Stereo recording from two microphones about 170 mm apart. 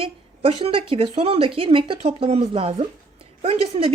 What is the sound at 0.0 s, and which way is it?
Speech, 35° right (ahead or behind).